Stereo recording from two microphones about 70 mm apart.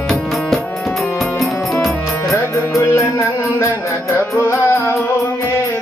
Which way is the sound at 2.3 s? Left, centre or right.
Left.